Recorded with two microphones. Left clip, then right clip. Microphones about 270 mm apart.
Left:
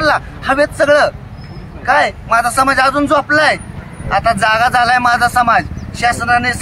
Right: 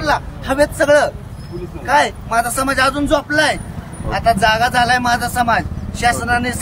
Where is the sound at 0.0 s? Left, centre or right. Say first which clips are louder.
Left 4 dB; centre.